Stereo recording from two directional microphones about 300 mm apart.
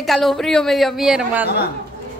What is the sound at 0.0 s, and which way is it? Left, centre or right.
A woman's voice, centre.